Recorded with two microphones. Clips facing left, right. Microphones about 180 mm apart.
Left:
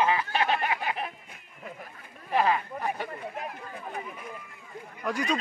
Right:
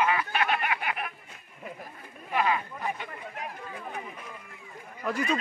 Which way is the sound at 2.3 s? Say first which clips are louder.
Left 2 dB; 35° left (ahead or behind).